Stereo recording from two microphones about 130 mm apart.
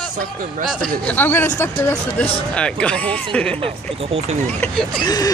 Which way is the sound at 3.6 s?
45° right (ahead or behind).